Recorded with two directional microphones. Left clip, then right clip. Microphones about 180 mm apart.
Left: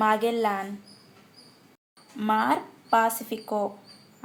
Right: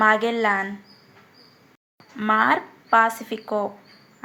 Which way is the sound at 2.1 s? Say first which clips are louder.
Right 5 dB; 5° right (ahead or behind).